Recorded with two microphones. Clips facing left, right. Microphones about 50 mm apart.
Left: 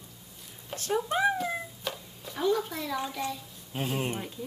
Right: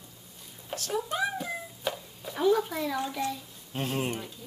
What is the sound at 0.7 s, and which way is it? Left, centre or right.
Speech, left.